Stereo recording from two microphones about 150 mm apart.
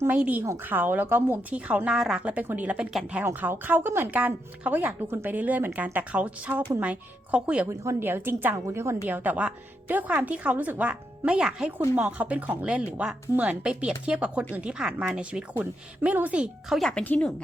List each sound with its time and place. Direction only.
0.0 s a woman's voice: 10° right (ahead or behind); by 17.3 s 10° left (ahead or behind)